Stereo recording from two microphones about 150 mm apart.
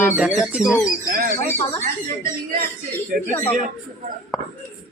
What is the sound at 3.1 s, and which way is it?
Speech, 60° right (ahead or behind).